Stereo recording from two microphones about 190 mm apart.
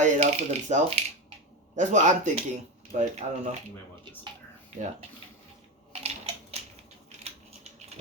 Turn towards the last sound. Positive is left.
turn(degrees=-35)  # may be behind; listen again after turning